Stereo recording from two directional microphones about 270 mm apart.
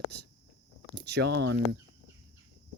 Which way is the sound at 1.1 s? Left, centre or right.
Right.